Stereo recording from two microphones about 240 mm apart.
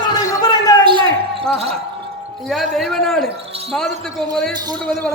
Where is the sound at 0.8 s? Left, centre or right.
Centre.